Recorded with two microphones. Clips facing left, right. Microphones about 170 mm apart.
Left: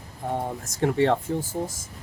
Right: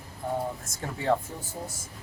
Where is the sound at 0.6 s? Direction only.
90° left.